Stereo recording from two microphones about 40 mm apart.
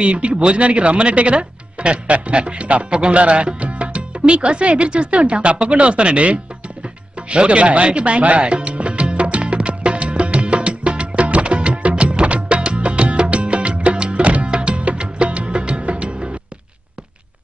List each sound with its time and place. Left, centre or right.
0.0 s speech: right
7.2 s music: right